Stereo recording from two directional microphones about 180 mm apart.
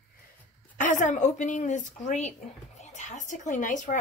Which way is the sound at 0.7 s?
45° left (ahead or behind).